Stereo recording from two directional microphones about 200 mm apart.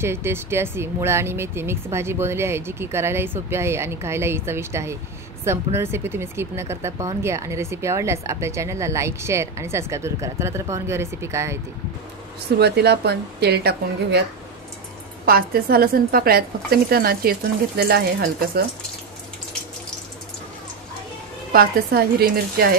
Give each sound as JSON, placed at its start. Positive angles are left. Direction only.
{"t": 0.0, "sound": "speech", "side_deg": -10}
{"t": 12.5, "sound": "speech", "side_deg": -55}
{"t": 15.2, "sound": "a woman's voice", "side_deg": -50}
{"t": 21.5, "sound": "a woman's voice", "side_deg": -50}